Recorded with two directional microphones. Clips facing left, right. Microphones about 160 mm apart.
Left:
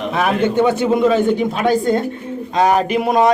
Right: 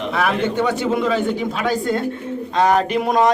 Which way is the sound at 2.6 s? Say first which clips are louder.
Left 2 dB; 10° left (ahead or behind).